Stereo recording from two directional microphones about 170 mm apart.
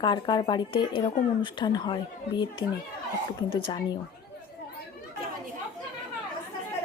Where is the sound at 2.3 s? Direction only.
90° left.